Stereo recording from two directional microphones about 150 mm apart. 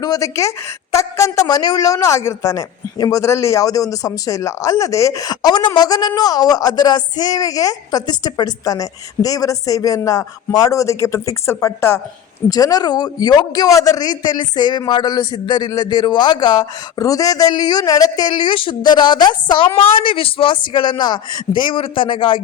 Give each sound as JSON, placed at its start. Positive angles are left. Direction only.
{"t": 0.0, "sound": "a woman's voice", "side_deg": 25}